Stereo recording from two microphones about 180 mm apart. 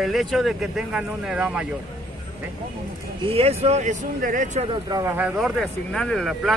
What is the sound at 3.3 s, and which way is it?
Speech, 35° right (ahead or behind).